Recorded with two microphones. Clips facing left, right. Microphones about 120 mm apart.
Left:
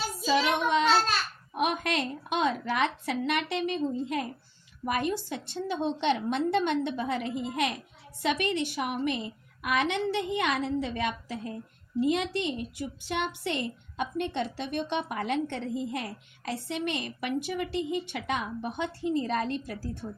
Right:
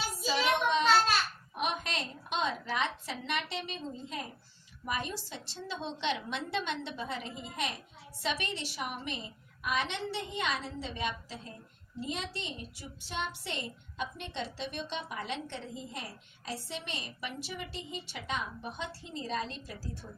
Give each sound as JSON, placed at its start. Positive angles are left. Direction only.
{"t": 0.3, "sound": "child singing", "side_deg": 55}
{"t": 1.5, "sound": "a woman's voice", "side_deg": 55}